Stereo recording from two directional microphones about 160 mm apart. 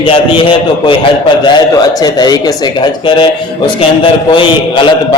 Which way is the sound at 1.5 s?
25° left (ahead or behind).